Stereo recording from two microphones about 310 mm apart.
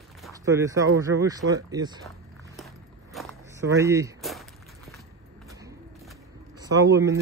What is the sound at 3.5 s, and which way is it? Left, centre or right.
Speech, centre.